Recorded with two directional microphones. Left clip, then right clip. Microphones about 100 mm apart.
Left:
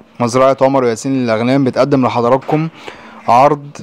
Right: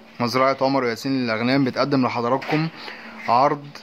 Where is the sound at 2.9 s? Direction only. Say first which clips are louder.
Left 9 dB; 35° left (ahead or behind).